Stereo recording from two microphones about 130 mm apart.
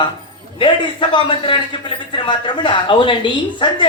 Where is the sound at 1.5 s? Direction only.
45° left (ahead or behind).